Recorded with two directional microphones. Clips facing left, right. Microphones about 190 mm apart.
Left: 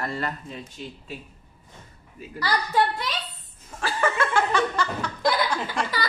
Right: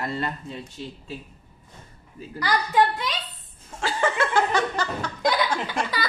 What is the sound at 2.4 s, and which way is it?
Speech, 20° right (ahead or behind).